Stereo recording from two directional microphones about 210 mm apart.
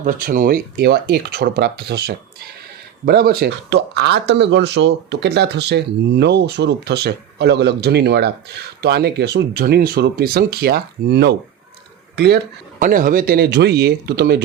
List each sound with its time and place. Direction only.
0.0 s speech: 40° right (ahead or behind)
12.8 s speech: 40° right (ahead or behind)